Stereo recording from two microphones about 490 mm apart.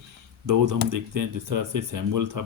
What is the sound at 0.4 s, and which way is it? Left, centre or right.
Speech, right.